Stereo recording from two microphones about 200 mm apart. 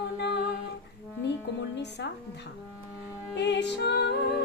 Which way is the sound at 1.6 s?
60° left (ahead or behind).